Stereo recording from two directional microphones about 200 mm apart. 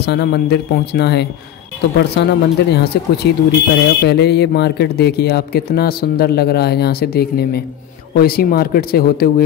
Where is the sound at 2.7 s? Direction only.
55° left (ahead or behind).